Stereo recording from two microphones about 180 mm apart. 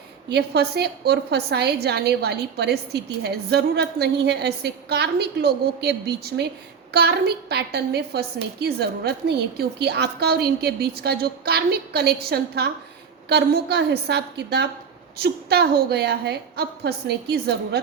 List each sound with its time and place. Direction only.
0.3 s a woman's voice: 65° right (ahead or behind)